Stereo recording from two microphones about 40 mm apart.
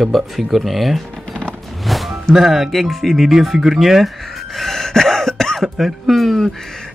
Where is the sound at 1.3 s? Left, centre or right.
Left.